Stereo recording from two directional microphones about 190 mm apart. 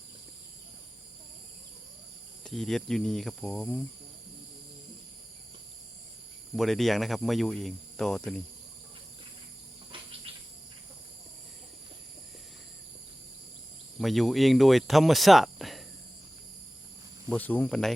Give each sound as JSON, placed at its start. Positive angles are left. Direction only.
{"t": 2.4, "sound": "speech", "side_deg": 0}
{"t": 6.6, "sound": "speech", "side_deg": 0}
{"t": 9.9, "sound": "cricket", "side_deg": -30}
{"t": 14.0, "sound": "speech", "side_deg": 0}
{"t": 17.2, "sound": "speech", "side_deg": 10}